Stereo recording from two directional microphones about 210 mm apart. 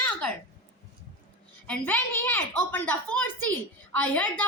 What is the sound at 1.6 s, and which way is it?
A woman's voice, 5° left (ahead or behind).